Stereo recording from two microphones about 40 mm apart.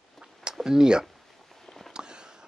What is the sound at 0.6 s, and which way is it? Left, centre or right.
Speech, centre.